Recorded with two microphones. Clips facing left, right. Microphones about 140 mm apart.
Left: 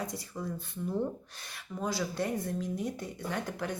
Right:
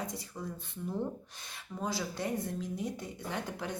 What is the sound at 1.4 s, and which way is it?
Speech, 25° right (ahead or behind).